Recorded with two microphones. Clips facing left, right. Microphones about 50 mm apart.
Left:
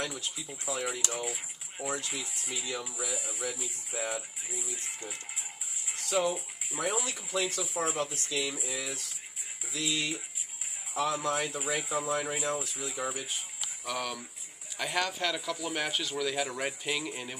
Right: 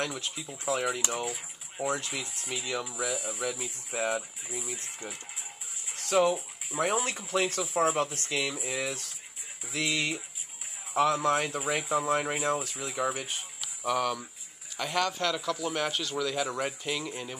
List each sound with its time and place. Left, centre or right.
0.0 s speech: right
6.0 s speech: right
13.8 s speech: centre